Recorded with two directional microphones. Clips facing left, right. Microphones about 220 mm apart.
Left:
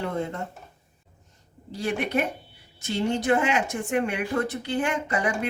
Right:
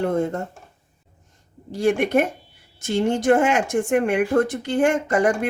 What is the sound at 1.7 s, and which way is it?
Speech, 50° right (ahead or behind).